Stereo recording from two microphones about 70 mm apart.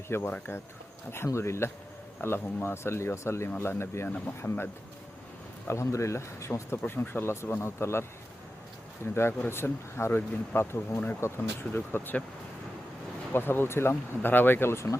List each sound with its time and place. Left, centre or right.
0.3 s speech: left
1.1 s speech: left
5.6 s speech: left
9.1 s speech: left
13.3 s speech: left